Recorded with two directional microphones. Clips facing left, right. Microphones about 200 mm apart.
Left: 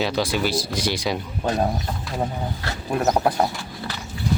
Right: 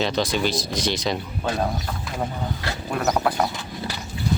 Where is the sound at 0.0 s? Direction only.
10° left (ahead or behind).